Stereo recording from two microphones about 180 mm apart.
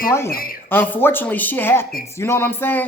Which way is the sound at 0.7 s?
10° left (ahead or behind).